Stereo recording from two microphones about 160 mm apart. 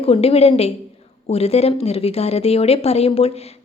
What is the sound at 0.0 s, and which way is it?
Speech, 40° left (ahead or behind).